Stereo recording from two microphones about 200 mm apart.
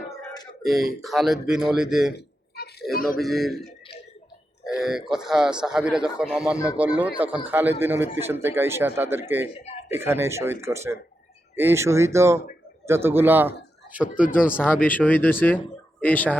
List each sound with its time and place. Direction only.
0.6 s a man's voice: centre (ahead or behind)
2.1 s a sound: 55° left (ahead or behind)
2.9 s a man's voice: 45° left (ahead or behind)
3.2 s a man's voice: centre (ahead or behind)
4.8 s a man's voice: centre (ahead or behind)
14.8 s speech: 10° left (ahead or behind)